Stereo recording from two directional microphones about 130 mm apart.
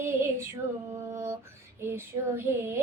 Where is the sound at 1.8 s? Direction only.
20° right (ahead or behind).